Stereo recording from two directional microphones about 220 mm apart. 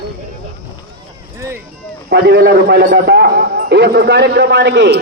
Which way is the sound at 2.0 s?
50° right (ahead or behind).